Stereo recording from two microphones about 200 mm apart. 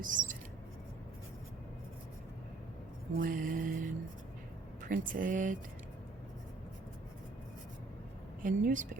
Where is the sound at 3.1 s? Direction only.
45° right (ahead or behind).